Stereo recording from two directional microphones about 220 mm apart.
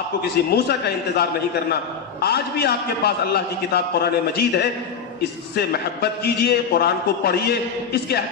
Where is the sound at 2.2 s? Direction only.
45° left (ahead or behind).